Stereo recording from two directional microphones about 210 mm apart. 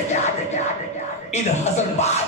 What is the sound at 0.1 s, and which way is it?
Music, 35° left (ahead or behind).